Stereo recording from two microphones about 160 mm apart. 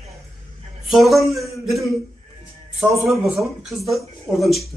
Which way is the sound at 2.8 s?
20° right (ahead or behind).